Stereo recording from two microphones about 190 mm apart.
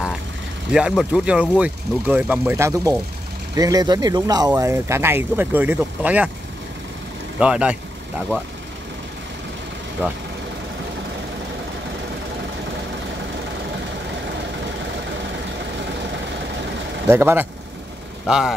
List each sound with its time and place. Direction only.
0.7 s speech: 5° right (ahead or behind)
7.3 s speech: 5° right (ahead or behind)
17.1 s speech: 10° right (ahead or behind)